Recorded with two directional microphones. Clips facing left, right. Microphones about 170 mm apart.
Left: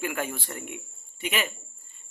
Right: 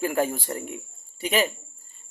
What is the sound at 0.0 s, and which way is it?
Speech, 35° right (ahead or behind).